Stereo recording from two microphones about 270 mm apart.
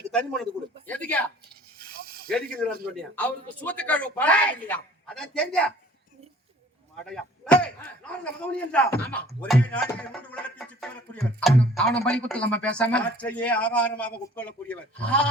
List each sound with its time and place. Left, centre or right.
0.1 s a man's voice: centre
1.8 s a sound: right
2.3 s speech: centre
7.0 s speech: centre